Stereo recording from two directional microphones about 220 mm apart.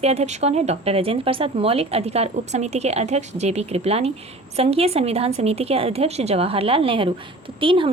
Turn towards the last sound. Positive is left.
turn(degrees=-25)  # may be behind; listen again after turning